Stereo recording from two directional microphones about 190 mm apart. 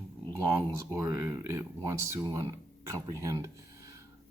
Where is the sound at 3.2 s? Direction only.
15° right (ahead or behind).